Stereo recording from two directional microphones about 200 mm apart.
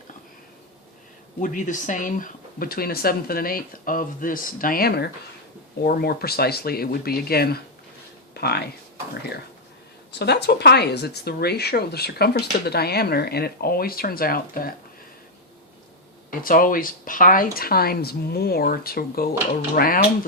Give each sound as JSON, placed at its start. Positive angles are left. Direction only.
{"t": 1.4, "sound": "speech", "side_deg": 40}
{"t": 8.3, "sound": "a sound", "side_deg": 55}
{"t": 10.2, "sound": "speech", "side_deg": 55}
{"t": 16.4, "sound": "speech", "side_deg": 45}